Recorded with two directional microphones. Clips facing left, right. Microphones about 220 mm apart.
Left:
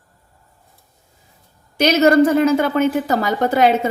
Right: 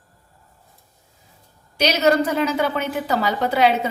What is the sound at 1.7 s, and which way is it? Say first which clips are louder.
A woman's voice: left 5 dB; 50° left (ahead or behind).